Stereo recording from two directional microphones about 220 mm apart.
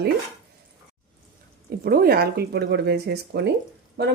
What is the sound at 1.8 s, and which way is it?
Speech, 40° right (ahead or behind).